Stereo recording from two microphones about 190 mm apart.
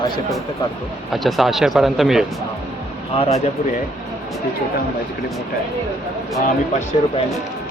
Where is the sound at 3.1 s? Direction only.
30° left (ahead or behind).